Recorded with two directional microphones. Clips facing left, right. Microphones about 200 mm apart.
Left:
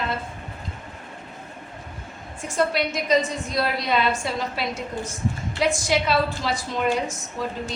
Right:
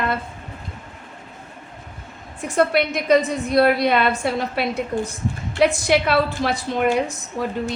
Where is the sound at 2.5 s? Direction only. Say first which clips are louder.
Right 4 dB; 60° right (ahead or behind).